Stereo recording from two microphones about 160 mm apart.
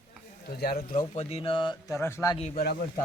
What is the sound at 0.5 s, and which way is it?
Speech, 75° left (ahead or behind).